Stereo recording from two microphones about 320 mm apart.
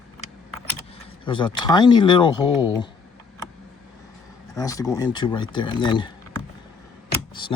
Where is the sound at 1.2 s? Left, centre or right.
Centre.